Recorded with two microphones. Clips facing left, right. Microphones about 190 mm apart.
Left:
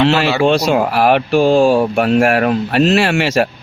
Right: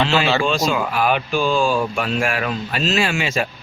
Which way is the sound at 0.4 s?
65° left (ahead or behind).